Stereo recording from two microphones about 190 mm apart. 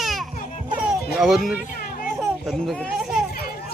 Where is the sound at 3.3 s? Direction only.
55° left (ahead or behind).